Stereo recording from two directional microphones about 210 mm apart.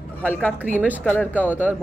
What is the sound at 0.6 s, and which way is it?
A woman's voice, 10° right (ahead or behind).